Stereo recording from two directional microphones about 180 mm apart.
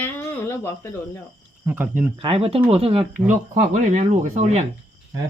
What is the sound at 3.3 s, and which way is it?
Speech, 45° right (ahead or behind).